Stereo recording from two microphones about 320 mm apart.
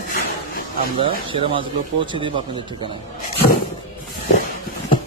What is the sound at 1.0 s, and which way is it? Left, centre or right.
Speech, centre.